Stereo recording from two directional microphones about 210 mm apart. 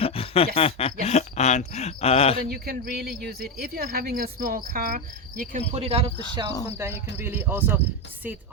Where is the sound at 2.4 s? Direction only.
45° right (ahead or behind); by 6.5 s 30° right (ahead or behind).